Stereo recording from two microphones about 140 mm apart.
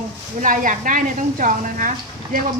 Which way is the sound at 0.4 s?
75° right (ahead or behind).